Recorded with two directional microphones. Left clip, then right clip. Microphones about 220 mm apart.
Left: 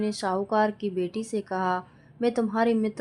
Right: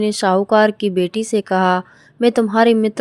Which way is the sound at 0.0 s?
35° right (ahead or behind).